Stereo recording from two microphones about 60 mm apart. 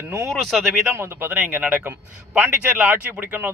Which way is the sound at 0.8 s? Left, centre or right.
Right.